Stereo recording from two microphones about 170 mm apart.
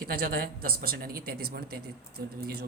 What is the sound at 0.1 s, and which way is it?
A man's voice, 60° right (ahead or behind).